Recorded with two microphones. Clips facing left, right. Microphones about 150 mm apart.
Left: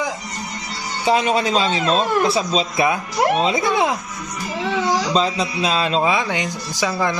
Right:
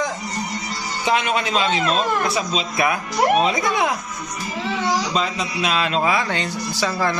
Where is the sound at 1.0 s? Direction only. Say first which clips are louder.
Left 3 dB; 30° left (ahead or behind).